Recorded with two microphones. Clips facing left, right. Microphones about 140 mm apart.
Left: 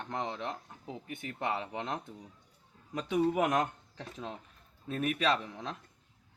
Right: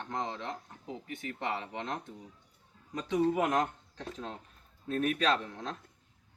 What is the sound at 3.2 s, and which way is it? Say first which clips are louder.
Speech: even; 10° left (ahead or behind).